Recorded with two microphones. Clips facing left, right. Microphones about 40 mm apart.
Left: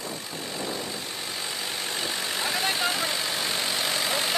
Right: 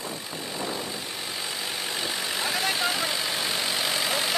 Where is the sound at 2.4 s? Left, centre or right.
Centre.